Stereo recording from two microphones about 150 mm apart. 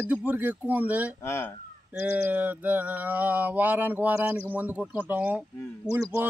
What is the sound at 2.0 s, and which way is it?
Mantra, 15° right (ahead or behind).